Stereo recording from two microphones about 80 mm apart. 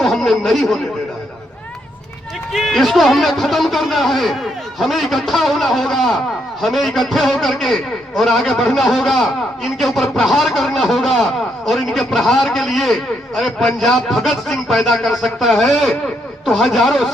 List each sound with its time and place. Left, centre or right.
0.0 s speech: centre
2.5 s a man's voice: centre